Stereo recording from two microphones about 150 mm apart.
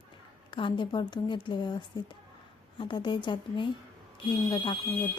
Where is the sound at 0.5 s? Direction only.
35° left (ahead or behind).